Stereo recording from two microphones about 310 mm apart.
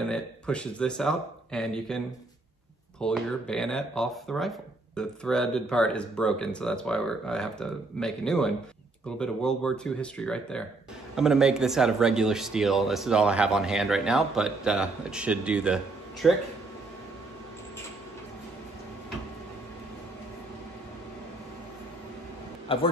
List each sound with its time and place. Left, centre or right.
0.0 s speech: centre
22.7 s a man's voice: centre